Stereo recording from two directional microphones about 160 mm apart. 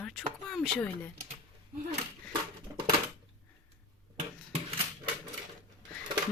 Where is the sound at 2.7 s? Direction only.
15° right (ahead or behind).